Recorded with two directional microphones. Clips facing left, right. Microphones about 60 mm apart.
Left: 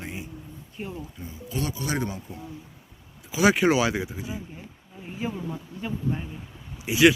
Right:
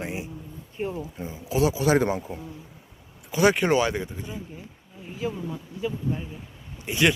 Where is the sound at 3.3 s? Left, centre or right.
Centre.